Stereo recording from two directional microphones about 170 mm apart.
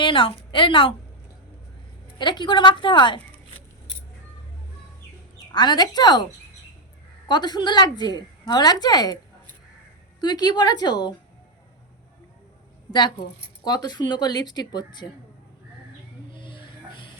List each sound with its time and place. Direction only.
0.0 s a woman's voice: 30° left (ahead or behind)
2.1 s a woman's voice: 25° left (ahead or behind)
5.5 s a woman's voice: 25° left (ahead or behind)
7.3 s a woman's voice: 25° left (ahead or behind)
10.2 s a woman's voice: 25° left (ahead or behind)
13.7 s a woman's voice: 20° left (ahead or behind)
16.3 s music: 30° left (ahead or behind)